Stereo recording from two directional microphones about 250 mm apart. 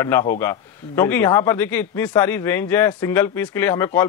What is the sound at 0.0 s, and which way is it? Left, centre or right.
A man's voice, centre.